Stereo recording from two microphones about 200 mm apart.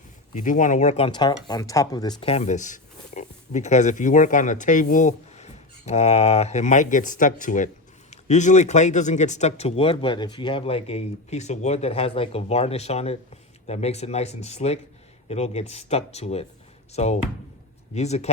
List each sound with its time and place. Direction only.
0.3 s speech: 40° left (ahead or behind); by 2.3 s 20° left (ahead or behind)
2.3 s speech: 35° left (ahead or behind)